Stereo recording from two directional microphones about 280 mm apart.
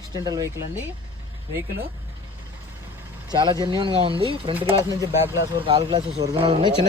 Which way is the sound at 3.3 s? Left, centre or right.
Centre.